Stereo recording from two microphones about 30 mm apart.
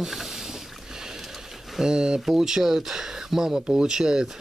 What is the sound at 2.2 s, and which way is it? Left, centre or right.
Speech, centre.